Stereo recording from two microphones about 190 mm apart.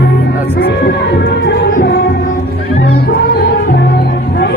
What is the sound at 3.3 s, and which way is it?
Music, 55° left (ahead or behind).